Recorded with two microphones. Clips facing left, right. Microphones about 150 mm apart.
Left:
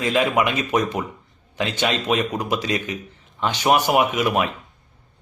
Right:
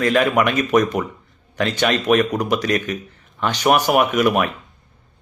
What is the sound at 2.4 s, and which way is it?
A man's voice, 10° left (ahead or behind).